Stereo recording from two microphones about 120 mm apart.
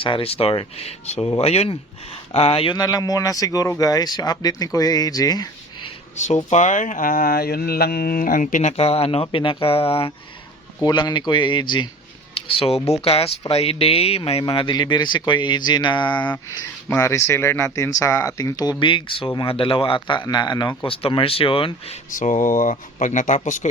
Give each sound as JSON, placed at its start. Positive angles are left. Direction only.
{"t": 0.0, "sound": "speech", "side_deg": 50}
{"t": 2.7, "sound": "speech", "side_deg": 30}
{"t": 6.1, "sound": "speech", "side_deg": 85}
{"t": 8.4, "sound": "speech", "side_deg": 80}
{"t": 10.8, "sound": "speech", "side_deg": 40}
{"t": 14.4, "sound": "speech", "side_deg": 40}
{"t": 16.1, "sound": "speech", "side_deg": 10}
{"t": 17.0, "sound": "speech", "side_deg": 25}
{"t": 22.1, "sound": "speech", "side_deg": 90}